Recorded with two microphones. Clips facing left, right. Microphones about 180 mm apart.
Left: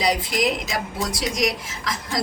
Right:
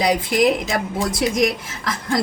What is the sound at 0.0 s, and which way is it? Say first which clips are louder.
A woman's voice: right 5 dB; 55° right (ahead or behind).